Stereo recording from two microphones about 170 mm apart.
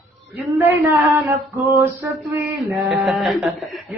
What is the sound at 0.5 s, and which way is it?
Male singing, 15° right (ahead or behind).